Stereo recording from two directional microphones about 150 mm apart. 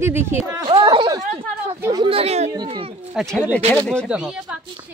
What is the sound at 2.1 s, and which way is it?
Speech, 40° right (ahead or behind).